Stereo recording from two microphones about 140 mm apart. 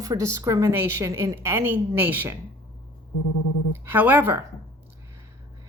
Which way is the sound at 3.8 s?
15° right (ahead or behind).